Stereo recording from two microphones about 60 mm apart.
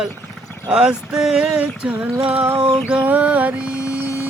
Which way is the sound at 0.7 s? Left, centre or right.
Centre.